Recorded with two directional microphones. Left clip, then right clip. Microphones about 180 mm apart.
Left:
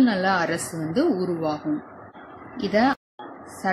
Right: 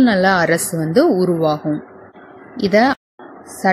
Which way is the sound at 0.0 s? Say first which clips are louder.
Right 7 dB; 45° right (ahead or behind).